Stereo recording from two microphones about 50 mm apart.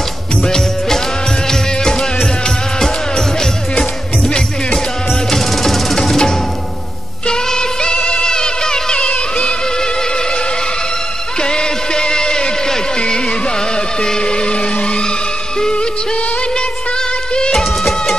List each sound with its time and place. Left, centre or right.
0.4 s music: centre
11.3 s a sound: centre
15.6 s music: centre